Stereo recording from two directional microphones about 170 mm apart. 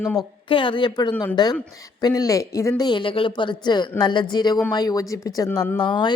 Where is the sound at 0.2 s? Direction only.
30° left (ahead or behind).